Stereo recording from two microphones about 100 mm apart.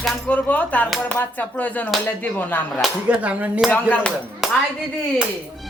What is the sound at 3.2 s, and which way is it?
Dishes, 15° right (ahead or behind).